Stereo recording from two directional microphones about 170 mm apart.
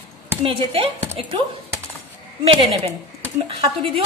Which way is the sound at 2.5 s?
35° right (ahead or behind).